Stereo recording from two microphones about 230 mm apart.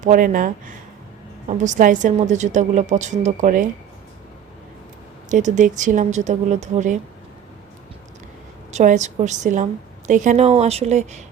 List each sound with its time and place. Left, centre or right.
0.0 s a woman's voice: right
5.3 s a woman's voice: right
8.7 s a woman's voice: right